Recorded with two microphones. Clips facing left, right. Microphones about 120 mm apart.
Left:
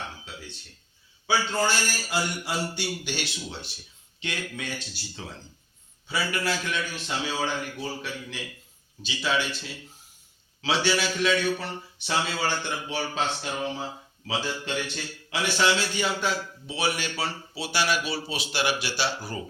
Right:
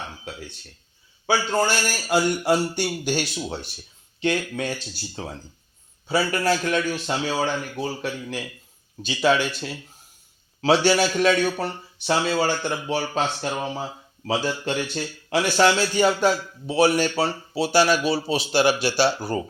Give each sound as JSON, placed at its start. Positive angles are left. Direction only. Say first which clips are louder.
{"t": 1.3, "sound": "a man's voice", "louder": "right 4 dB", "side_deg": -50}